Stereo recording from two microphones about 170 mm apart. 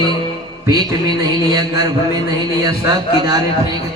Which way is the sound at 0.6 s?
25° right (ahead or behind).